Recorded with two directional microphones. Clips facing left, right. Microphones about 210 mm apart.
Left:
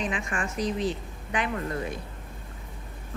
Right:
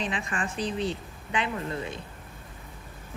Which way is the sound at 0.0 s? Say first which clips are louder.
Left 1 dB; 30° right (ahead or behind).